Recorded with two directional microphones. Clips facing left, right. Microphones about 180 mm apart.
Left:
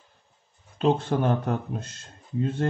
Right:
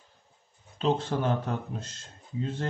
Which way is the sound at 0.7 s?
55° left (ahead or behind).